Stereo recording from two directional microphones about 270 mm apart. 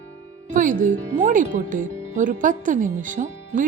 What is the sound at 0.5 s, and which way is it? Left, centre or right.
Speech, right.